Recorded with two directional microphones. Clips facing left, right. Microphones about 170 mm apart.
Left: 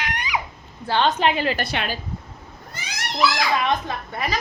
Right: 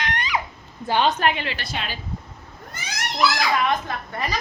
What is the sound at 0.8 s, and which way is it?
Speech, 15° right (ahead or behind).